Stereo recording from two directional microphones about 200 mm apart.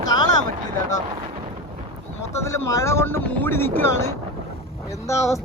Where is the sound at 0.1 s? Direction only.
20° left (ahead or behind).